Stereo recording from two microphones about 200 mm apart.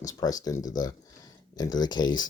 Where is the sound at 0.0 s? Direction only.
20° left (ahead or behind).